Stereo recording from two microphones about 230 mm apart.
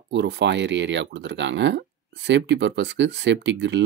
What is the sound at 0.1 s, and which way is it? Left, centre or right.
Speech, right.